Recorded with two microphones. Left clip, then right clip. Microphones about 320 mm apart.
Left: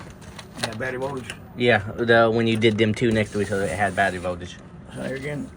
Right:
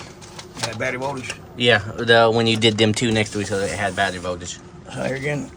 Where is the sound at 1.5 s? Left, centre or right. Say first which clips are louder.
Right 3 dB; centre.